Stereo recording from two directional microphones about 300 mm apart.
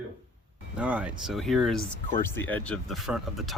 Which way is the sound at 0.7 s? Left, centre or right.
Centre.